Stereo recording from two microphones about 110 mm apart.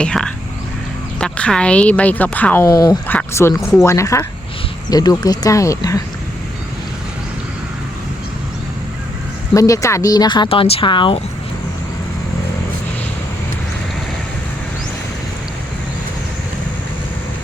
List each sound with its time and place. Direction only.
0.0 s a woman's voice: 10° left (ahead or behind)
2.6 s speech: 35° left (ahead or behind)
3.1 s speech: 20° left (ahead or behind)
9.6 s speech: 30° left (ahead or behind); by 11.2 s 50° left (ahead or behind)